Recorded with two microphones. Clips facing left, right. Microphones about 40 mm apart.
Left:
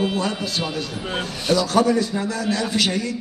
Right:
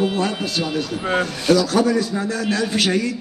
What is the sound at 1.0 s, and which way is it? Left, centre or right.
Speech, right.